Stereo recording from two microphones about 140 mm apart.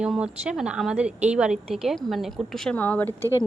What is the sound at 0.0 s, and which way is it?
A woman's voice, 5° right (ahead or behind).